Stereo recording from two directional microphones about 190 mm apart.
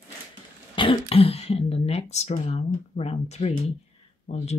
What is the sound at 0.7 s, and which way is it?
Speech, 30° left (ahead or behind).